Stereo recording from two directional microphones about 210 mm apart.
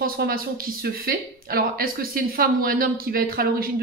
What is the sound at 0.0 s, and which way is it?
Speech, 45° right (ahead or behind).